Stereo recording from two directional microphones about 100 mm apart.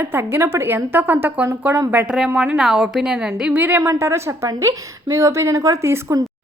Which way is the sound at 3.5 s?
20° right (ahead or behind).